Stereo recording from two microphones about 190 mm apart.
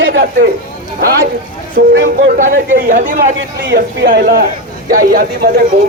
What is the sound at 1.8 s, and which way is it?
Speech, 55° right (ahead or behind).